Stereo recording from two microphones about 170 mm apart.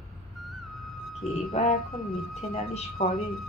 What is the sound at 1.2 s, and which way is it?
Speech, 40° left (ahead or behind).